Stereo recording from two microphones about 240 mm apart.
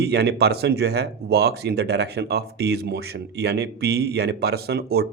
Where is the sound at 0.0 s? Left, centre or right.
Right.